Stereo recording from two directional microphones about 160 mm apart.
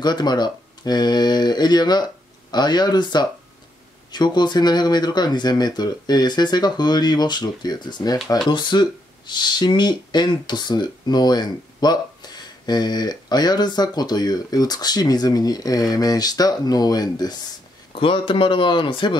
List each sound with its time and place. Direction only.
0.0 s speech: 25° left (ahead or behind)